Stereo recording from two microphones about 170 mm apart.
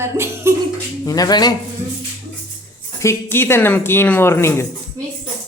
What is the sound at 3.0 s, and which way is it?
Speech, 15° left (ahead or behind).